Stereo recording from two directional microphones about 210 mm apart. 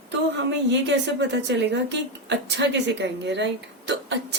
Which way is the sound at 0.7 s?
55° right (ahead or behind).